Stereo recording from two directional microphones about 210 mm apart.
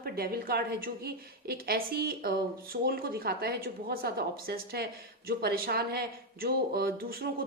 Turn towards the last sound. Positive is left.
turn(degrees=-45)  # may be behind; listen again after turning